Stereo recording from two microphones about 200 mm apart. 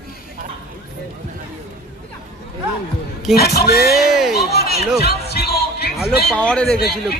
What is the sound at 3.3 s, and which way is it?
Speech, 50° left (ahead or behind).